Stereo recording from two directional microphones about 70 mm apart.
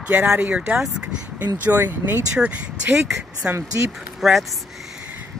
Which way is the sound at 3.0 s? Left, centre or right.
Centre.